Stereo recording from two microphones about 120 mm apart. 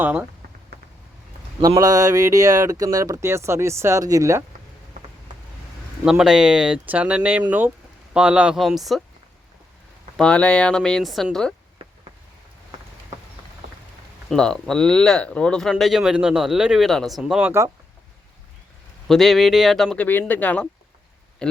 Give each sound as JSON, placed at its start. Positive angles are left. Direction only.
{"t": 0.0, "sound": "speech", "side_deg": -15}
{"t": 1.6, "sound": "speech", "side_deg": -30}
{"t": 6.1, "sound": "speech", "side_deg": -5}
{"t": 10.2, "sound": "speech", "side_deg": 10}
{"t": 14.3, "sound": "speech", "side_deg": 5}
{"t": 19.0, "sound": "speech", "side_deg": 0}
{"t": 20.1, "sound": "speech", "side_deg": 15}